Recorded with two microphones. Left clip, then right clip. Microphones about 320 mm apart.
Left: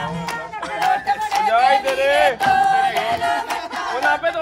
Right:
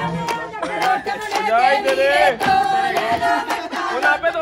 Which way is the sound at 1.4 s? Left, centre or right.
Left.